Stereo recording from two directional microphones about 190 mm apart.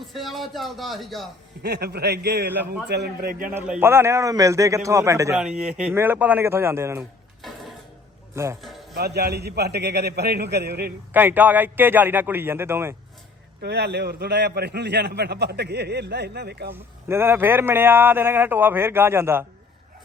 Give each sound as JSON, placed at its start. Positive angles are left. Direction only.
{"t": 0.0, "sound": "speech", "side_deg": 0}
{"t": 1.6, "sound": "a man's voice", "side_deg": -60}
{"t": 2.5, "sound": "speech", "side_deg": -5}
{"t": 2.9, "sound": "a man's voice", "side_deg": -55}
{"t": 3.5, "sound": "speech", "side_deg": -10}
{"t": 5.4, "sound": "speech", "side_deg": -5}
{"t": 7.4, "sound": "a sound", "side_deg": 0}
{"t": 8.4, "sound": "speech", "side_deg": -15}
{"t": 9.0, "sound": "a man's voice", "side_deg": -60}
{"t": 11.1, "sound": "speech", "side_deg": -10}
{"t": 13.6, "sound": "a man's voice", "side_deg": -60}
{"t": 16.7, "sound": "speech", "side_deg": -10}